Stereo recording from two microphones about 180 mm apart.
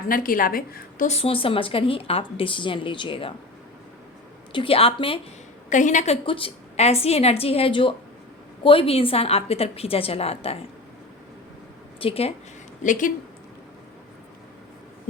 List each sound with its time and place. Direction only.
0.1 s a woman's voice: 50° left (ahead or behind); by 3.3 s 30° left (ahead or behind)
4.5 s speech: 30° left (ahead or behind)
5.6 s a woman's voice: 45° left (ahead or behind)
6.2 s a woman's voice: 30° left (ahead or behind)
11.9 s speech: 30° left (ahead or behind)
12.8 s a woman's voice: 45° left (ahead or behind)